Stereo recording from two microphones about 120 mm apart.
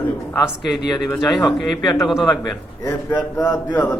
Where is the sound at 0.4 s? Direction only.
Centre (ahead or behind).